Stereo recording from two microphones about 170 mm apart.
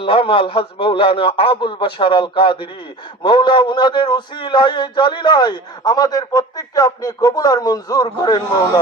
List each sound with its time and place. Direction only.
0.0 s a man's voice: 30° left (ahead or behind)